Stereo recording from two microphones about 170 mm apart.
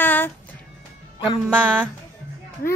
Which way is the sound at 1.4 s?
10° right (ahead or behind).